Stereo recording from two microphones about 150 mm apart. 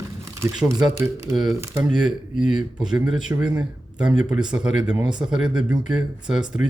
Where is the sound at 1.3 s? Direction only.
Centre (ahead or behind).